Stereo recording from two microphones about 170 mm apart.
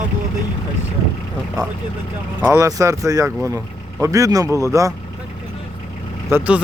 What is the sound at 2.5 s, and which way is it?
Speech, 20° right (ahead or behind).